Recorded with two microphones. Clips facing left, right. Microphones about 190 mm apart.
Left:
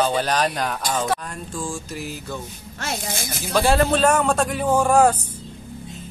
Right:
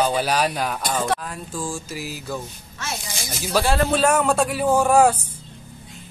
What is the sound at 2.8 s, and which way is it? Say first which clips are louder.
Speech: left 3 dB; 50° left (ahead or behind).